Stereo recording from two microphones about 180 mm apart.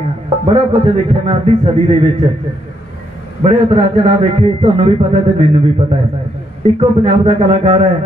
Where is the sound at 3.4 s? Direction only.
30° right (ahead or behind).